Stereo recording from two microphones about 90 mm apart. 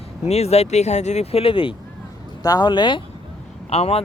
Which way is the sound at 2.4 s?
45° left (ahead or behind).